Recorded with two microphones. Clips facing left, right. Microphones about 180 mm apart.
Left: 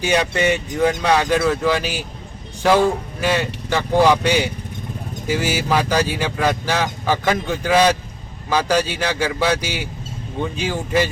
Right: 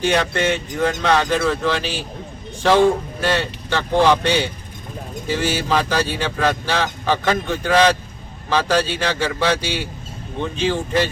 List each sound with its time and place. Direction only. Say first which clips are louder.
0.1 s speech: left 5 dB; 10° left (ahead or behind)